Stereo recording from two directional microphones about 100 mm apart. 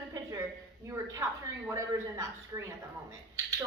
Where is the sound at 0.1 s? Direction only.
35° right (ahead or behind).